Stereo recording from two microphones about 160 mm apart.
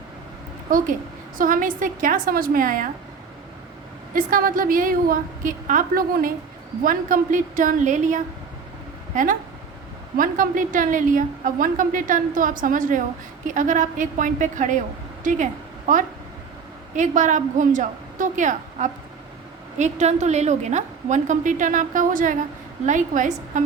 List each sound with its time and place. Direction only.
1.4 s a woman's voice: 55° right (ahead or behind)
4.1 s a woman's voice: 60° right (ahead or behind)
16.9 s a woman's voice: 50° right (ahead or behind)